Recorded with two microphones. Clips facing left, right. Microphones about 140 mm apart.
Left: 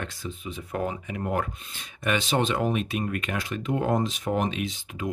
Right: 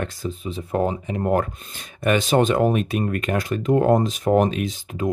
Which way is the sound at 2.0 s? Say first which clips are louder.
Right 7 dB; 45° right (ahead or behind).